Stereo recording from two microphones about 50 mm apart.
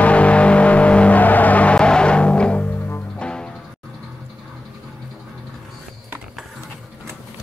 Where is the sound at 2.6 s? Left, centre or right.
Left.